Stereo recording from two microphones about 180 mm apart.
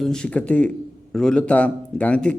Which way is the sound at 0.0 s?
5° left (ahead or behind).